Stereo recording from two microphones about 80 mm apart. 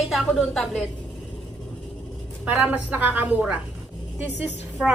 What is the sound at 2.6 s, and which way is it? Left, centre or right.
A woman's voice, centre.